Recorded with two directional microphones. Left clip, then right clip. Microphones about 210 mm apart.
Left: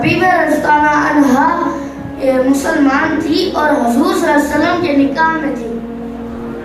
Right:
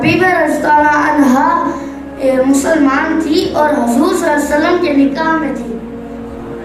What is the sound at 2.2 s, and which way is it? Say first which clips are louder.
A woman's voice: right 1 dB; 60° right (ahead or behind).